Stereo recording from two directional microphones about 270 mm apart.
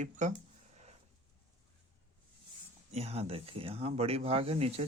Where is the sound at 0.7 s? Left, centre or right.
Right.